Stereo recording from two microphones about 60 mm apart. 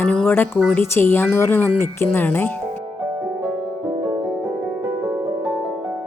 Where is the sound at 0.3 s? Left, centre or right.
Left.